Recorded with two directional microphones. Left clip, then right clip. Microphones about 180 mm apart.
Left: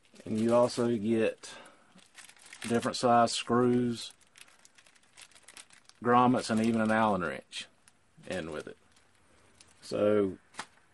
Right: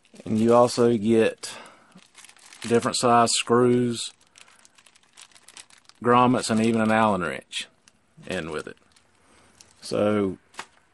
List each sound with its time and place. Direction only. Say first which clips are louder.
0.5 s speech: right 8 dB; 55° right (ahead or behind); by 4.1 s 35° right (ahead or behind)
5.1 s a sound: right 5 dB; 10° right (ahead or behind)
6.0 s speech: right 6 dB; 30° right (ahead or behind)
9.8 s speech: right 4 dB; 55° right (ahead or behind)